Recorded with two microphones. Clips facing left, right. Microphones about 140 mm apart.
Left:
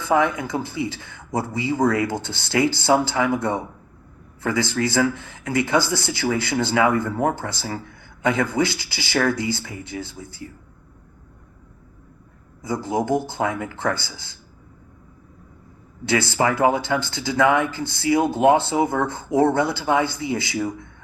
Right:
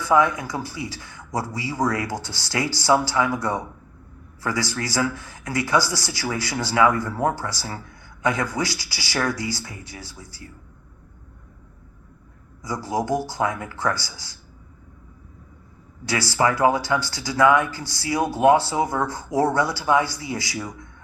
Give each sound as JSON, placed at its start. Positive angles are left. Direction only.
{"t": 0.0, "sound": "speech", "side_deg": 25}
{"t": 12.6, "sound": "speech", "side_deg": 25}
{"t": 16.0, "sound": "speech", "side_deg": 25}